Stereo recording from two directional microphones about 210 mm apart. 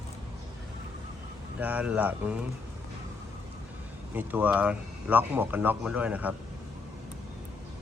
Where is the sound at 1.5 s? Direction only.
5° right (ahead or behind).